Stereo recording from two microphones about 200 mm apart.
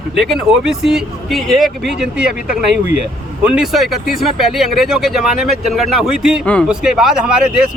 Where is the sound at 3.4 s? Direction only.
5° right (ahead or behind).